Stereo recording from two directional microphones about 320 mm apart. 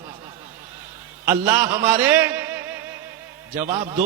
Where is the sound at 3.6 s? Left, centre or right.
Right.